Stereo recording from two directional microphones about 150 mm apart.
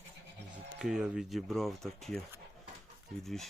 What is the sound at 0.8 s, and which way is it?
Speech, 5° right (ahead or behind).